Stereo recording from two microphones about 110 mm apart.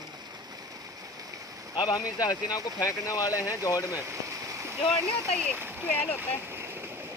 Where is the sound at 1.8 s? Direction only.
40° left (ahead or behind).